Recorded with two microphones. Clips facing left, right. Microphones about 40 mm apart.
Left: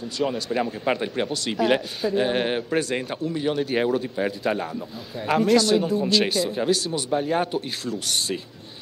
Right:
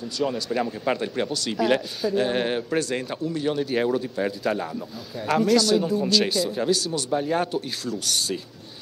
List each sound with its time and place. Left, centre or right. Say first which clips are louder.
0.2 s speech: left 1 dB; centre